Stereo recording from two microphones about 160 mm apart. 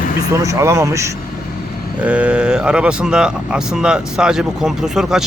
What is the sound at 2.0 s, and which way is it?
Speech, 10° right (ahead or behind).